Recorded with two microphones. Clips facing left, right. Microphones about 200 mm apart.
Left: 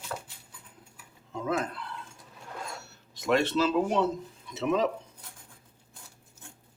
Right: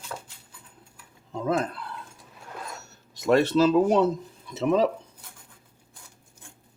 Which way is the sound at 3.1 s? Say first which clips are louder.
Right 5 dB; 40° right (ahead or behind).